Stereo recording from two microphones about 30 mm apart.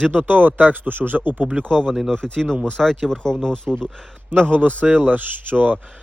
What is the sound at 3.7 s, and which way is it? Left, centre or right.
Speech, right.